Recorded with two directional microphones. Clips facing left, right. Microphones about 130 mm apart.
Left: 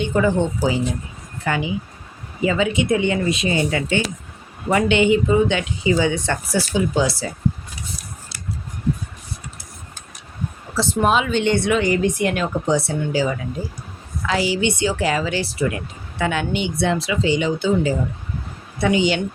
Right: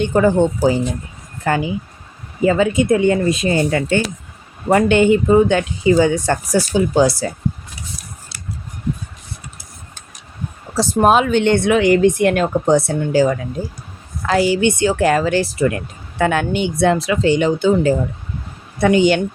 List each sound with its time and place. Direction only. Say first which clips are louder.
0.0 s speech: right 5 dB; 45° right (ahead or behind)
10.8 s speech: right 5 dB; 40° right (ahead or behind)